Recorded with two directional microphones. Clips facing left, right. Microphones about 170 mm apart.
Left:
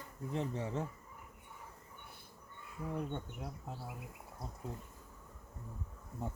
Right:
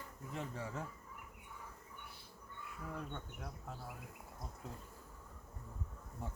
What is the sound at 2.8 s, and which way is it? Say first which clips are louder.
Speech: left 7 dB; 20° left (ahead or behind).